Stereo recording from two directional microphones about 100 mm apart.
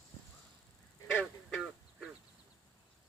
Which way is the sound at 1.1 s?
5° left (ahead or behind).